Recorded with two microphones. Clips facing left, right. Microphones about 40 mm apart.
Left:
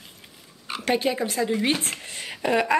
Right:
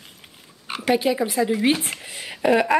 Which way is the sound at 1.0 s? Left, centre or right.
Centre.